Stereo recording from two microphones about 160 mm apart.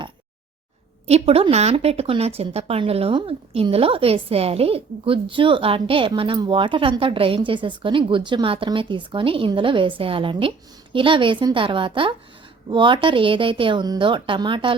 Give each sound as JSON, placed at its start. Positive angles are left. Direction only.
{"t": 1.0, "sound": "speech", "side_deg": -40}